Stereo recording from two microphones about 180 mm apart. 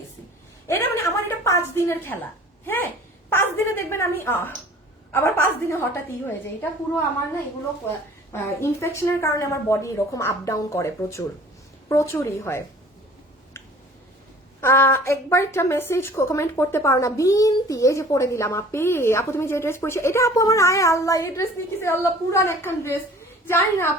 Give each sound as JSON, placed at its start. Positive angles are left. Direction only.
{"t": 0.7, "sound": "a sound", "side_deg": 15}
{"t": 2.6, "sound": "a woman's voice", "side_deg": 10}
{"t": 8.3, "sound": "a woman's voice", "side_deg": 15}
{"t": 14.6, "sound": "a woman's voice", "side_deg": 15}